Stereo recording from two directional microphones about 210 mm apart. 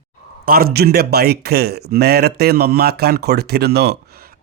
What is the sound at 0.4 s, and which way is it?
A man's voice, 45° right (ahead or behind).